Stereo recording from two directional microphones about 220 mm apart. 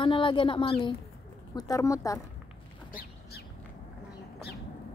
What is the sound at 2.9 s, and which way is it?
Bird, 45° left (ahead or behind).